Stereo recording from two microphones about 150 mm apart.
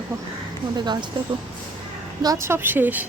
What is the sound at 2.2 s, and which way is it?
Speech, 20° right (ahead or behind).